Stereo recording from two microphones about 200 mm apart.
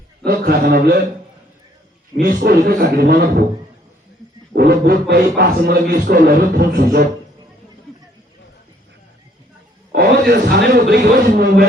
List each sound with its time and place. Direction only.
0.3 s speech: 50° right (ahead or behind)
2.2 s speech: 50° right (ahead or behind)
4.5 s speech: 50° right (ahead or behind)
9.9 s speech: 50° right (ahead or behind)